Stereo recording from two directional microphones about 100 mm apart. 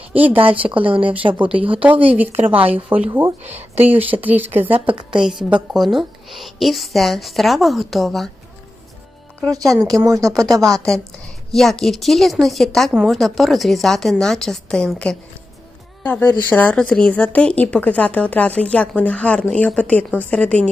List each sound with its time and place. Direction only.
0.1 s speech: 15° right (ahead or behind)
0.3 s speech: 65° right (ahead or behind)
1.8 s speech: 15° right (ahead or behind)
4.7 s speech: 60° right (ahead or behind)
5.1 s a woman's voice: 5° right (ahead or behind)
10.0 s speech: 35° right (ahead or behind)
10.6 s a woman's voice: 5° left (ahead or behind)
12.9 s speech: 10° right (ahead or behind)
13.1 s a woman's voice: centre (ahead or behind)
16.1 s speech: 15° left (ahead or behind)